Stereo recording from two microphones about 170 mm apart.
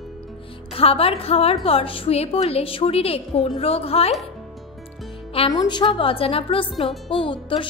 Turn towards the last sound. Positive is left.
turn(degrees=30)  # may be behind; listen again after turning